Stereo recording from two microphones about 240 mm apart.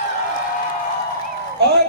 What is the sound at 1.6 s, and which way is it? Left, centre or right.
Speech, right.